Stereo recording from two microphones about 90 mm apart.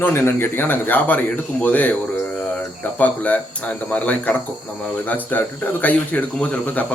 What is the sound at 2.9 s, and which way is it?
Speech, 15° left (ahead or behind).